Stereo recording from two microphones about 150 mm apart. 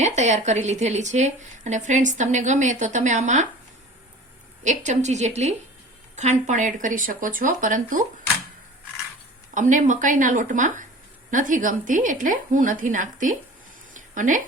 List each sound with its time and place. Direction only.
0.0 s a woman's voice: 50° right (ahead or behind)
4.6 s a woman's voice: 55° right (ahead or behind)
9.6 s speech: 55° right (ahead or behind)
13.9 s a sound: 60° right (ahead or behind)